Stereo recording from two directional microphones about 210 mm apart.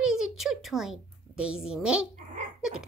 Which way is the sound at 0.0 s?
Centre (ahead or behind).